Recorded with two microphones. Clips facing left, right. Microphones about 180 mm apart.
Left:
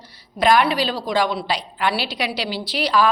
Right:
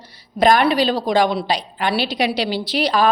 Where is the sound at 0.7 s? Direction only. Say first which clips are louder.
Right 5 dB; 20° right (ahead or behind).